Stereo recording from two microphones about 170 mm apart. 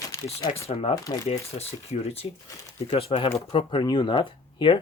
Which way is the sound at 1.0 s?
20° left (ahead or behind).